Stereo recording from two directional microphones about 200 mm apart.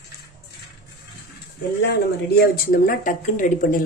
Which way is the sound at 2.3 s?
50° left (ahead or behind).